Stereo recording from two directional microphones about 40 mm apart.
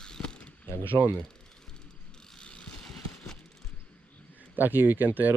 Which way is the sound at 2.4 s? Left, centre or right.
Left.